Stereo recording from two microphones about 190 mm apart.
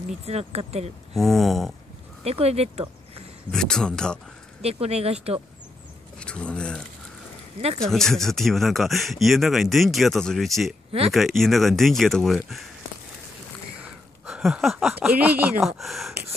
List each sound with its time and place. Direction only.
0.2 s speech: 35° right (ahead or behind)
1.1 s speech: centre (ahead or behind)
2.2 s speech: 35° right (ahead or behind)
3.5 s speech: 5° left (ahead or behind)
4.6 s speech: 35° right (ahead or behind)
6.1 s a sound: 5° left (ahead or behind)
7.8 s speech: centre (ahead or behind)
14.2 s speech: 5° right (ahead or behind)